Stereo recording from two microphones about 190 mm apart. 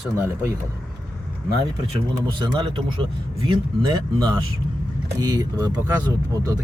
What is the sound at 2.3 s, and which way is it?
Speech, 25° right (ahead or behind).